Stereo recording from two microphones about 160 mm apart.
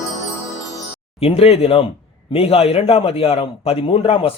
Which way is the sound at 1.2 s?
40° left (ahead or behind).